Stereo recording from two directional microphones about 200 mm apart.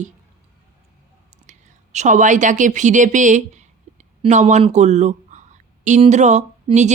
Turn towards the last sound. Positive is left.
turn(degrees=-35)  # may be behind; listen again after turning